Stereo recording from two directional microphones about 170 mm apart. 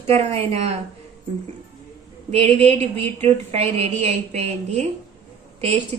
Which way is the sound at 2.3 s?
40° right (ahead or behind).